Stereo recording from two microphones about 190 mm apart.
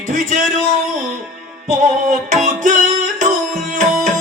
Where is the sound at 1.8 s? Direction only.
40° right (ahead or behind).